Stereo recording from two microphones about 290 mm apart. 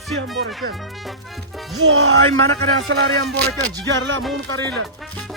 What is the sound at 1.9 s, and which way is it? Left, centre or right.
Speech, right.